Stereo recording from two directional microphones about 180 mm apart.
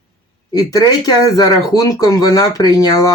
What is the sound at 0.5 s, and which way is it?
Speech, 20° left (ahead or behind).